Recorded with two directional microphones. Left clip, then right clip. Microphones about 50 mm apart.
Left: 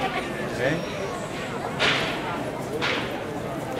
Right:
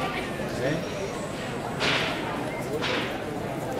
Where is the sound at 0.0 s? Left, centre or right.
Left.